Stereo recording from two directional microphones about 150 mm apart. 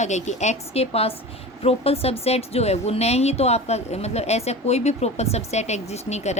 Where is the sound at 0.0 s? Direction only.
50° left (ahead or behind).